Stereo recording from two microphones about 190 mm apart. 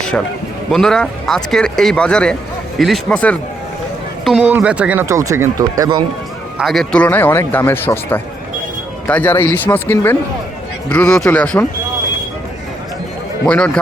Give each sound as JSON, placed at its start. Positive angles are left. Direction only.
{"t": 0.7, "sound": "speech", "side_deg": 5}
{"t": 6.6, "sound": "speech", "side_deg": 0}
{"t": 13.4, "sound": "speech", "side_deg": 5}